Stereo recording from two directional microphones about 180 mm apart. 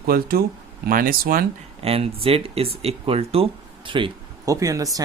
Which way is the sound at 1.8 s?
30° right (ahead or behind).